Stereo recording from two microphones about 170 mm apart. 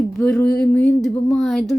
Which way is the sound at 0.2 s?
5° left (ahead or behind).